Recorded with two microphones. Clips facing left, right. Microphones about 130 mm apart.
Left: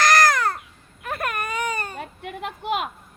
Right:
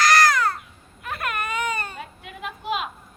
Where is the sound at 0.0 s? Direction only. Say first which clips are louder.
Even; 50° left (ahead or behind).